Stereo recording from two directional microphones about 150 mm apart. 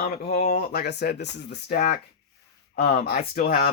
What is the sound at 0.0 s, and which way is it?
Speech, 75° left (ahead or behind).